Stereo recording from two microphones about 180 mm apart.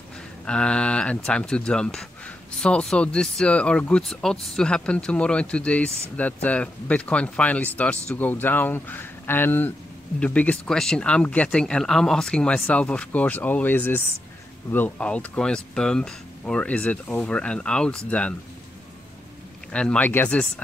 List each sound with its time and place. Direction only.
0.5 s speech: 5° left (ahead or behind)
19.7 s speech: 5° left (ahead or behind)